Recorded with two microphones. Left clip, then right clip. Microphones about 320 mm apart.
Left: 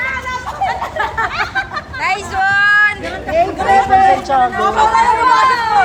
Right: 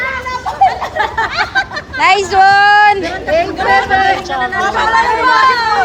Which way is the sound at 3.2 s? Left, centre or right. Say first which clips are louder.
Left 1 dB; right.